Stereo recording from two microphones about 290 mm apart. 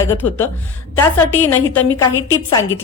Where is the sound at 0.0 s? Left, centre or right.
Centre.